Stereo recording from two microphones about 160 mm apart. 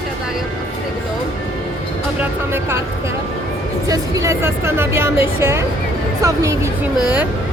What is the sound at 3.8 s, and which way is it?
A woman's voice, 20° right (ahead or behind).